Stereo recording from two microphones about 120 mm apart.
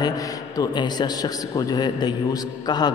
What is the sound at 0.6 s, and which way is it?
A man's voice, 35° left (ahead or behind).